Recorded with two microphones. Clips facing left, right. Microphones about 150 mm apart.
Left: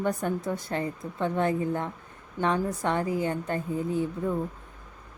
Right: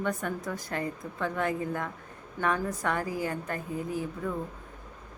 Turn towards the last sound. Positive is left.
turn(degrees=25)  # may be behind; listen again after turning